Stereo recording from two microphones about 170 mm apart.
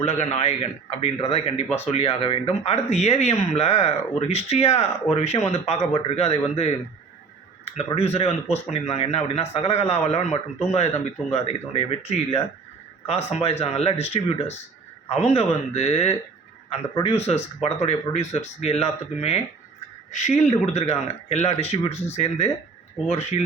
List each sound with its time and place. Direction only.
0.0 s a man's voice: 40° left (ahead or behind)
7.9 s a man's voice: 35° left (ahead or behind)